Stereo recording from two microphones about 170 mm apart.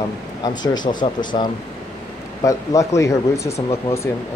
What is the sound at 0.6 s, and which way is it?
Speech, 25° left (ahead or behind).